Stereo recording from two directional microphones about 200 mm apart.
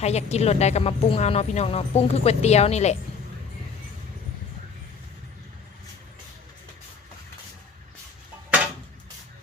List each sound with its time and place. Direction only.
0.0 s a woman's voice: 35° left (ahead or behind)